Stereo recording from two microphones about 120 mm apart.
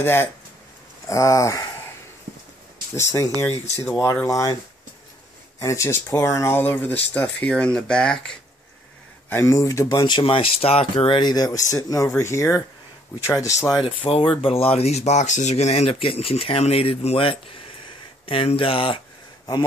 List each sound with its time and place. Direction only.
0.0 s speech: 20° left (ahead or behind)
3.0 s speech: 25° left (ahead or behind)
5.6 s speech: 25° left (ahead or behind); by 8.4 s 5° left (ahead or behind)
9.3 s speech: 25° left (ahead or behind); by 11.1 s 50° left (ahead or behind)
11.1 s speech: 35° left (ahead or behind)
13.8 s speech: 50° left (ahead or behind)